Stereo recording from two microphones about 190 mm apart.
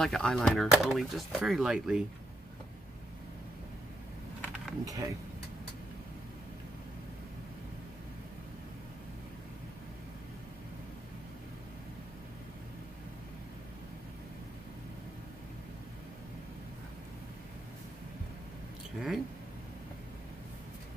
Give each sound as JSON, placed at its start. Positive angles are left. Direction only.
{"t": 0.0, "sound": "speech", "side_deg": 0}
{"t": 4.8, "sound": "speech", "side_deg": -15}
{"t": 18.9, "sound": "speech", "side_deg": 0}